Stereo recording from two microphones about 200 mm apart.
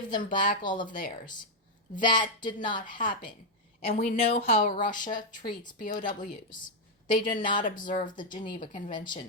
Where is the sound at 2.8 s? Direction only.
40° left (ahead or behind).